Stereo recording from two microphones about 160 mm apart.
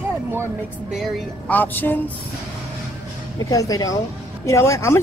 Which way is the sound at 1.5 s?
10° left (ahead or behind).